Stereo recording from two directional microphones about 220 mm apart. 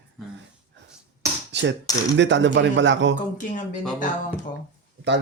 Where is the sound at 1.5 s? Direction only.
50° right (ahead or behind).